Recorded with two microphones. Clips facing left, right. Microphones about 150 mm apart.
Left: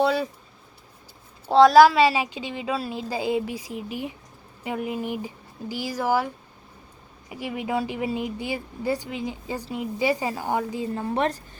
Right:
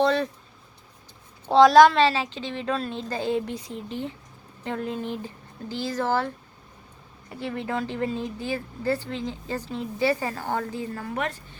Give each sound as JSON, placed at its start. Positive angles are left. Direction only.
{"t": 0.0, "sound": "speech", "side_deg": 5}
{"t": 1.5, "sound": "speech", "side_deg": 0}
{"t": 11.0, "sound": "a woman's voice", "side_deg": 30}